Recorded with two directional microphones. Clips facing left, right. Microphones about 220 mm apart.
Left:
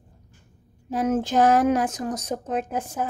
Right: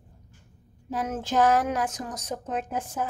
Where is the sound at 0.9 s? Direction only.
20° left (ahead or behind).